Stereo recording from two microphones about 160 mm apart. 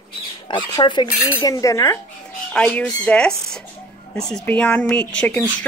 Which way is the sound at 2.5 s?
5° left (ahead or behind).